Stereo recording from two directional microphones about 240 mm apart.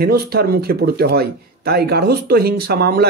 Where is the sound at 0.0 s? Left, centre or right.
Right.